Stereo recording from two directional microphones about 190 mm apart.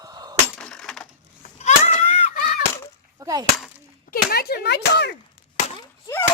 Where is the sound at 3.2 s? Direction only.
20° right (ahead or behind).